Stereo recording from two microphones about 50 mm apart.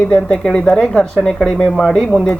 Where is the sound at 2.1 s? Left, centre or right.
Centre.